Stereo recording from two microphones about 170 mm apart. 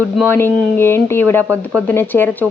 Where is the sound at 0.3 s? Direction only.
15° left (ahead or behind).